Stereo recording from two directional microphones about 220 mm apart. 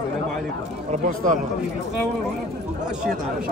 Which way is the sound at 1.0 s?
35° right (ahead or behind).